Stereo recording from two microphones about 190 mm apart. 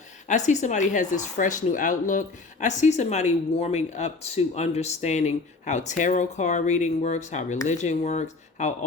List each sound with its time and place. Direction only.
0.3 s speech: 40° left (ahead or behind)